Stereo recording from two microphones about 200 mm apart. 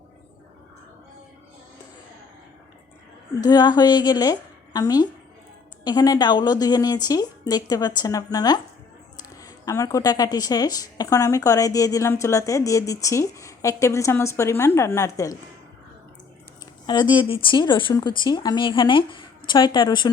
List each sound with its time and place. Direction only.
3.4 s a woman's voice: 20° left (ahead or behind)
16.8 s a woman's voice: 20° left (ahead or behind)